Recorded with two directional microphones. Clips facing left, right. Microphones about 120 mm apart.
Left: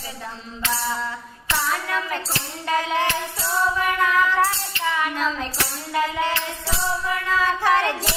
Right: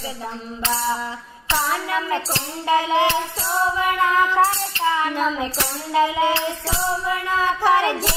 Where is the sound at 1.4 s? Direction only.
20° right (ahead or behind).